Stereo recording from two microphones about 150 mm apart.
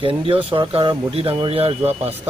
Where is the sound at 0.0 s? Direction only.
35° right (ahead or behind).